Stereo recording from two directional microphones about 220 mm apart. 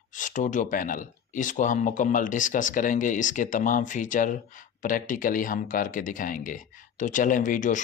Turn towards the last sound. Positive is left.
turn(degrees=35)  # may be behind; listen again after turning